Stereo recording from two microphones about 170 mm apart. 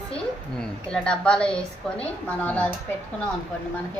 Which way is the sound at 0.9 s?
5° left (ahead or behind).